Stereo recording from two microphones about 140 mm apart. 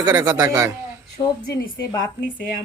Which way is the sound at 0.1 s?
30° right (ahead or behind).